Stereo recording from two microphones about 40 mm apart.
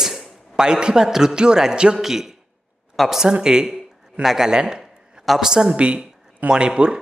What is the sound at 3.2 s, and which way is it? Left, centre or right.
A man's voice, centre.